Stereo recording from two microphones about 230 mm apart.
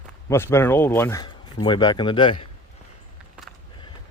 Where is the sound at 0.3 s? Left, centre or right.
Centre.